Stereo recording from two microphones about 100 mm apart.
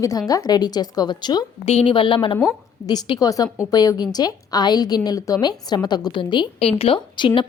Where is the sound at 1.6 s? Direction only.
90° left.